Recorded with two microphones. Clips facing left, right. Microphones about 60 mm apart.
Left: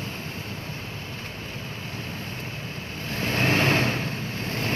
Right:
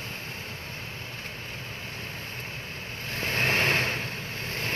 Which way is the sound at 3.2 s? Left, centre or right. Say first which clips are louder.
Left 3 dB; centre.